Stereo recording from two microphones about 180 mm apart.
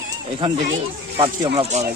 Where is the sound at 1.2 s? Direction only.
30° right (ahead or behind).